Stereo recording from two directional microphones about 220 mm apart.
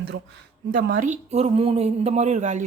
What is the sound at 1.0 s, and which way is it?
Speech, 30° right (ahead or behind).